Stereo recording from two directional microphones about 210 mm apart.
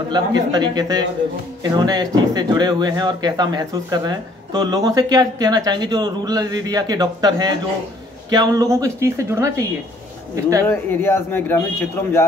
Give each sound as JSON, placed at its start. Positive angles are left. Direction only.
{"t": 0.1, "sound": "speech", "side_deg": -20}
{"t": 10.7, "sound": "speech", "side_deg": 10}